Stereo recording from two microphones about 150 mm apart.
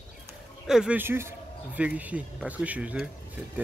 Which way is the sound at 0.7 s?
5° right (ahead or behind).